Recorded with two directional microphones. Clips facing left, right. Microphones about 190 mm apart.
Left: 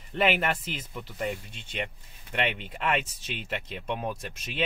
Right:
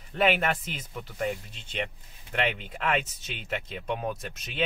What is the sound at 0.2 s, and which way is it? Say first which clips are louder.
Speech: right 1 dB; 5° left (ahead or behind).